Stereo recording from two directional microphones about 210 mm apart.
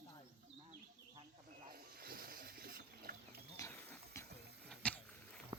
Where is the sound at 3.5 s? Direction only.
15° left (ahead or behind).